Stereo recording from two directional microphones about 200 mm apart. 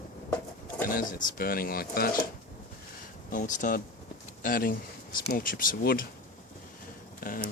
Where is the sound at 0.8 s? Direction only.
45° left (ahead or behind).